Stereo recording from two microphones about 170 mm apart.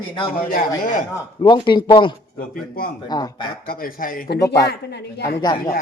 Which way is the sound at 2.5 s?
55° left (ahead or behind).